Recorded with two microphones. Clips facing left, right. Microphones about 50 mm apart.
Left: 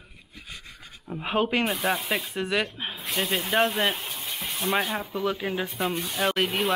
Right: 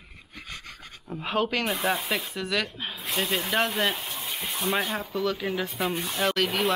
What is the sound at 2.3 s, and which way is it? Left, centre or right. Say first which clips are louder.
Speech: left 2 dB; left.